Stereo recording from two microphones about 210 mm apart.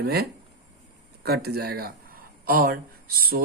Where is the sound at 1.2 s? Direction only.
50° right (ahead or behind).